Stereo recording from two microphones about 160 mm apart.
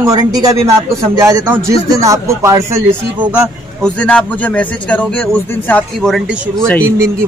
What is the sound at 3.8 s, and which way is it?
A man's voice, 5° left (ahead or behind).